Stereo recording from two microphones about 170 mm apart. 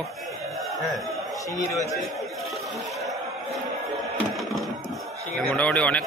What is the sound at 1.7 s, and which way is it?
Speech, 20° left (ahead or behind).